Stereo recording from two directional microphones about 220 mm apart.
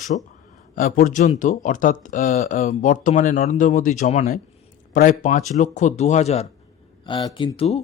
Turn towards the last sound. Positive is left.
turn(degrees=25)  # may be behind; listen again after turning